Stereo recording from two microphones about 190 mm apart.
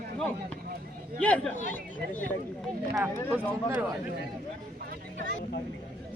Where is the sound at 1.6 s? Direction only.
45° left (ahead or behind).